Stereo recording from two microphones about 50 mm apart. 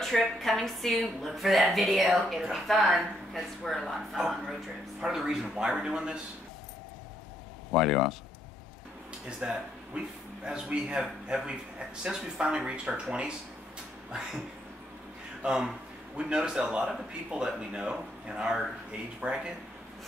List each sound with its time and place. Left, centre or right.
0.0 s a woman's voice: centre
7.7 s a woman's voice: centre
9.4 s speech: centre
15.4 s speech: centre